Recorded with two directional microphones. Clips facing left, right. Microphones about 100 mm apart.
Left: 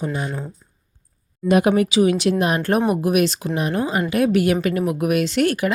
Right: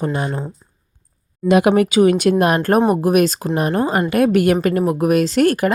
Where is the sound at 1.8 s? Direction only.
50° right (ahead or behind).